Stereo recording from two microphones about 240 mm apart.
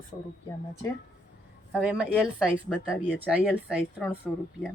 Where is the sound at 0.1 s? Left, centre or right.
Left.